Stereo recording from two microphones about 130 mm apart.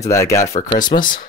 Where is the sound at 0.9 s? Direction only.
65° left (ahead or behind).